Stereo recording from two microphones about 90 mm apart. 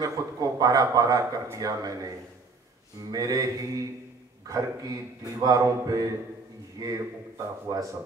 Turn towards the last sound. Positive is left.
turn(degrees=-40)  # may be behind; listen again after turning